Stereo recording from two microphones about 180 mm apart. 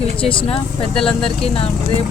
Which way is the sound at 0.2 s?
30° left (ahead or behind).